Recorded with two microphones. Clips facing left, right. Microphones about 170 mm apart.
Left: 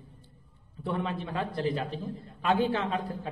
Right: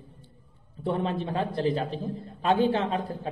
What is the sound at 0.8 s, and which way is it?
A man's voice, 30° right (ahead or behind).